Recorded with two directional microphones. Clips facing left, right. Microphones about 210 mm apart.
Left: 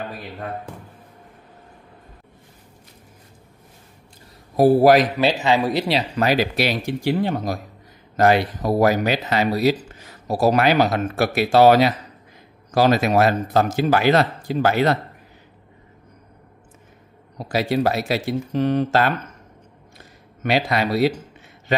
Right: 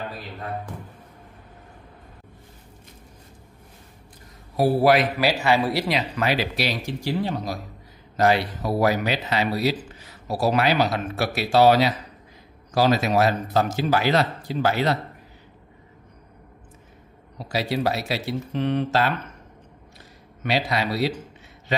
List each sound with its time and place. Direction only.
4.6 s speech: 45° left (ahead or behind)
5.1 s speech: 20° left (ahead or behind)
5.9 s speech: 35° left (ahead or behind); by 15.0 s 50° left (ahead or behind)
17.4 s speech: 50° left (ahead or behind)
20.4 s speech: 50° left (ahead or behind)